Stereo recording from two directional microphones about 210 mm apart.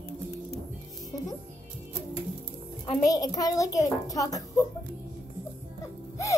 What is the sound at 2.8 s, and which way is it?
A child's voice, 20° left (ahead or behind).